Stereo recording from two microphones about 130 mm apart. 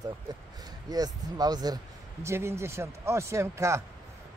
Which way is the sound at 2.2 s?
20° right (ahead or behind).